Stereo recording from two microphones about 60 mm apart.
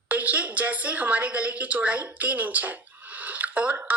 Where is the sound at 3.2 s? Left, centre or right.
Right.